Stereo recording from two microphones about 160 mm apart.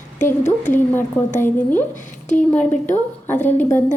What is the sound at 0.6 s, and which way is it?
A woman's voice, 15° left (ahead or behind).